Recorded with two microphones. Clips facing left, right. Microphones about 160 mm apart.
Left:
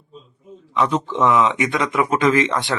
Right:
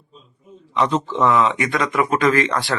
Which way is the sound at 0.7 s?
5° left (ahead or behind).